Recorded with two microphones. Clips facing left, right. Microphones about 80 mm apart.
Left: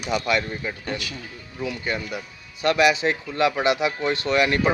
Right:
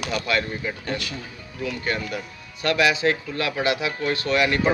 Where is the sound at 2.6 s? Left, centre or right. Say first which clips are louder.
Left 1 dB; left.